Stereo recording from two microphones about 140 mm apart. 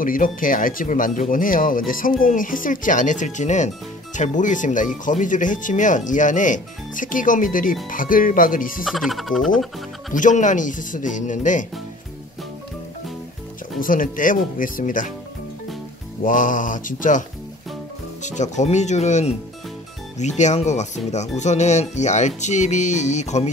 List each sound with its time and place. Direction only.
0.0 s speech: 75° left (ahead or behind)
8.8 s speech: centre (ahead or behind)
10.1 s speech: 65° left (ahead or behind)
13.7 s speech: 80° left
16.3 s speech: 70° left (ahead or behind)
18.2 s speech: 60° left (ahead or behind)